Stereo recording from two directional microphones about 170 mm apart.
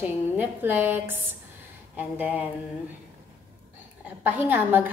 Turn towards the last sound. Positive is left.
turn(degrees=-10)  # may be behind; listen again after turning